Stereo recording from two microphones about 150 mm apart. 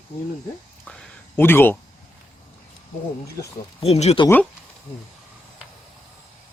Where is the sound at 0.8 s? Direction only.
5° left (ahead or behind).